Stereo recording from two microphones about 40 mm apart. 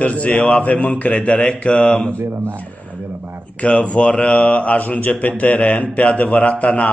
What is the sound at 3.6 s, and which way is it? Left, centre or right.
Speech, left.